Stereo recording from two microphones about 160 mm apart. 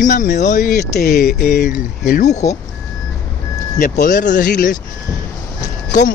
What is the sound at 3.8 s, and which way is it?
Speech, 60° left (ahead or behind).